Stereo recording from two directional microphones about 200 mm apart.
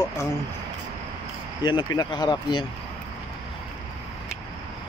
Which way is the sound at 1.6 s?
20° left (ahead or behind).